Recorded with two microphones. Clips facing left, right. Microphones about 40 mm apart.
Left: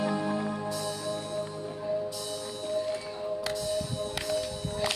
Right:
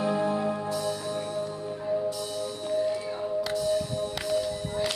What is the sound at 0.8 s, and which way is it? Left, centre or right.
Music, right.